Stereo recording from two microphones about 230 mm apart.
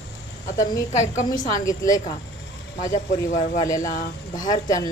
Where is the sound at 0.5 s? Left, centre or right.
Centre.